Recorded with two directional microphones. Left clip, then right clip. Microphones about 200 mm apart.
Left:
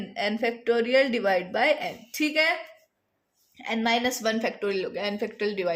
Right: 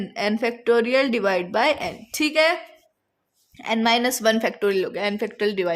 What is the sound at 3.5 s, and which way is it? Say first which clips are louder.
A woman's voice: right 5 dB; 55° right (ahead or behind).